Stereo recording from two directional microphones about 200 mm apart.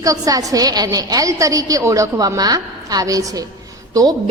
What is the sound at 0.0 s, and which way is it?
A woman's voice, 15° right (ahead or behind).